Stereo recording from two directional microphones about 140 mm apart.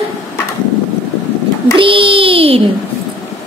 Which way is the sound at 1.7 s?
40° right (ahead or behind).